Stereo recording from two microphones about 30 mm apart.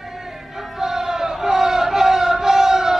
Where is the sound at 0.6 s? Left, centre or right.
Centre.